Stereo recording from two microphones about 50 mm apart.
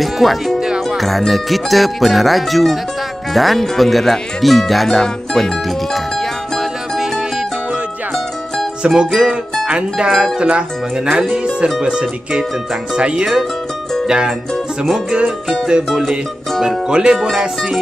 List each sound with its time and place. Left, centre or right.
0.0 s speech: centre
0.6 s music: centre
0.8 s speech: centre
6.5 s music: centre
8.8 s speech: centre
14.0 s music: centre
15.6 s music: centre
16.6 s speech: centre